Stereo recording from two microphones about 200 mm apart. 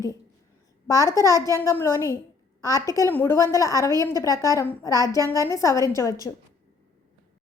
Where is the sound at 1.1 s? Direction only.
15° left (ahead or behind).